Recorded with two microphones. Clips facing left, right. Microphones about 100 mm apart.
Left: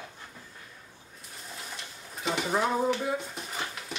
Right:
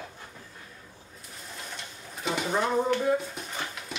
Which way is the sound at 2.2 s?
Centre (ahead or behind).